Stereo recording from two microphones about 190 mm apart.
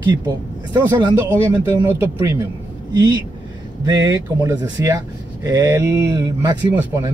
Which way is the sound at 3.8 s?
15° right (ahead or behind).